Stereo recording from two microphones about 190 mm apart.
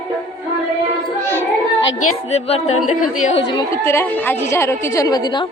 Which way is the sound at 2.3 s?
35° left (ahead or behind).